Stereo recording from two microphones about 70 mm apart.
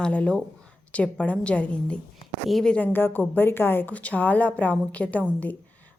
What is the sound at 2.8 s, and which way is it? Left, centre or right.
A woman's voice, left.